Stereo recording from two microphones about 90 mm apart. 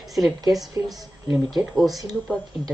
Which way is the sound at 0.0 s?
Centre (ahead or behind).